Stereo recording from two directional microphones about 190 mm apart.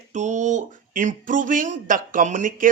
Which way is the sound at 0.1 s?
40° right (ahead or behind).